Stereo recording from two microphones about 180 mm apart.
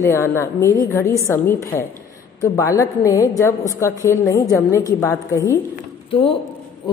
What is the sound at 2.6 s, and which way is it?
A woman's voice, 15° left (ahead or behind).